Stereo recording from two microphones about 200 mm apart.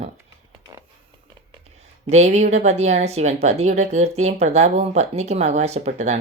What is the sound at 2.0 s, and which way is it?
A woman's voice, 35° right (ahead or behind).